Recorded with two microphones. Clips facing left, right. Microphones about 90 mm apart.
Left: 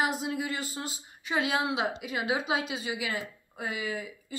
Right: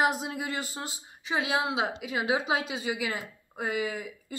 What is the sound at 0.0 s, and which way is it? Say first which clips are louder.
Speech: right 2 dB; 30° right (ahead or behind).